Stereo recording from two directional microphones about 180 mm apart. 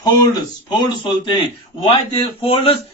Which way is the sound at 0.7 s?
25° left (ahead or behind).